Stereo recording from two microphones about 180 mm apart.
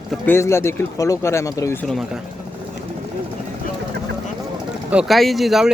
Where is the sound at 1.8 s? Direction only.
Centre (ahead or behind).